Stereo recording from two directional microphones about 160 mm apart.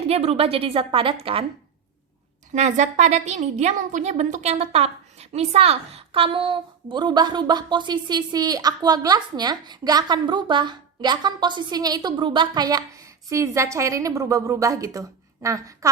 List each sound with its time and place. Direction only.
0.1 s a woman's voice: 40° right (ahead or behind)
2.5 s a woman's voice: 45° right (ahead or behind); by 15.9 s 20° right (ahead or behind)